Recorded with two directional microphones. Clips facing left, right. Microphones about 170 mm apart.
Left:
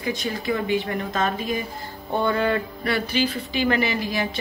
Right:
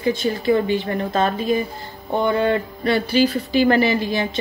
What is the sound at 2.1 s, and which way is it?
Speech, 20° right (ahead or behind).